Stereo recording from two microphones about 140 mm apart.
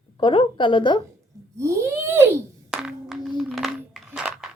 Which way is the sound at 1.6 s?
20° right (ahead or behind).